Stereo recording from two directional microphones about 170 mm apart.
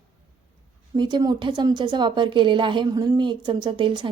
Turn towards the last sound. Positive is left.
turn(degrees=-30)  # may be behind; listen again after turning